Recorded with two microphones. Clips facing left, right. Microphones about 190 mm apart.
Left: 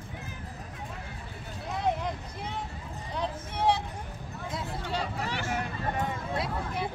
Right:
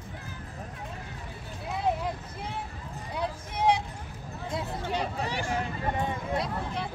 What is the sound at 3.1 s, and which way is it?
Vehicle, 10° right (ahead or behind).